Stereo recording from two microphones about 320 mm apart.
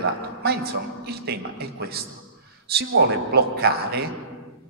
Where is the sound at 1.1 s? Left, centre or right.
Right.